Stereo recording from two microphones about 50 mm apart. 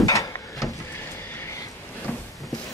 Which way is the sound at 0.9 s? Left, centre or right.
Left.